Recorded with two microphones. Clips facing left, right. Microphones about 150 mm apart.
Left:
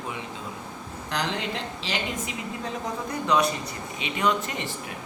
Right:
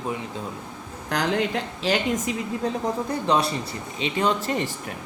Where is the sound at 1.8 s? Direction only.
50° right (ahead or behind).